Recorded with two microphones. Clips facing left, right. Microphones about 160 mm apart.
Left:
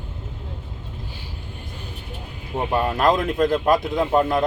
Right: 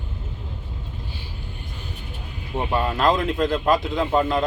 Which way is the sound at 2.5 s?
15° left (ahead or behind).